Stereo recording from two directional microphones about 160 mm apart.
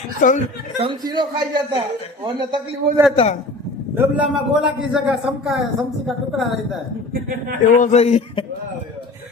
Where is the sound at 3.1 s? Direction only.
35° left (ahead or behind).